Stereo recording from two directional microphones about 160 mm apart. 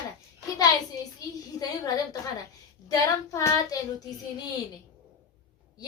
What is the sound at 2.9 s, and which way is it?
Speech, 20° left (ahead or behind).